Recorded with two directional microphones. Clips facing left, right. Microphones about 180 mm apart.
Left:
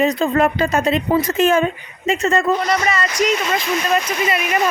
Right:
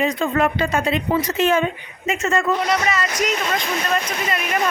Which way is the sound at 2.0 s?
35° left (ahead or behind).